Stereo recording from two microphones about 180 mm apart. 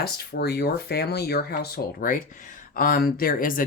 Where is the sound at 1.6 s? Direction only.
50° left (ahead or behind).